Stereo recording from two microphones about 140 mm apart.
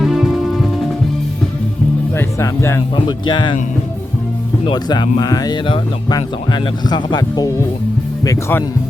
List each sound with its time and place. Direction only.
0.0 s music: centre (ahead or behind)
2.1 s speech: 20° left (ahead or behind)
2.9 s speech: 35° left (ahead or behind)
4.6 s speech: 35° left (ahead or behind)